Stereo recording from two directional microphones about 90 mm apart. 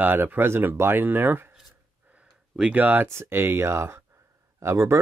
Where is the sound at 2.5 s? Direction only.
15° right (ahead or behind).